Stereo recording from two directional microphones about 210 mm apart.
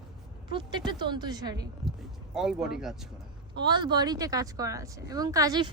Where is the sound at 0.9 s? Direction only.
20° right (ahead or behind).